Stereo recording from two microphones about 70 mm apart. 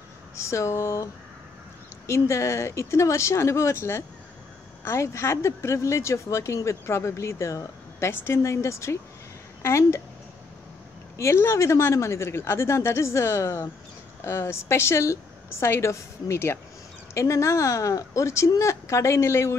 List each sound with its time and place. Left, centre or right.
0.4 s speech: left
2.0 s a woman's voice: left
11.1 s a woman's voice: left